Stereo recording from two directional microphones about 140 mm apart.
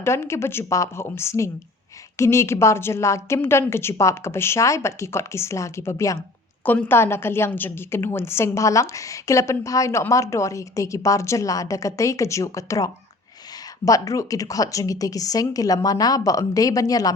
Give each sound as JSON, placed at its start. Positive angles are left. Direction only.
{"t": 0.0, "sound": "a woman's voice", "side_deg": 20}